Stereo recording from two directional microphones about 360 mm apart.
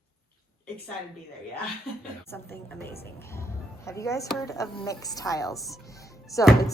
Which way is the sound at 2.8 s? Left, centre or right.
Left.